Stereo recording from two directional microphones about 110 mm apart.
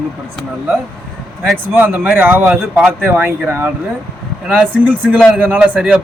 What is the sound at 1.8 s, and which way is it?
Speech, 15° right (ahead or behind).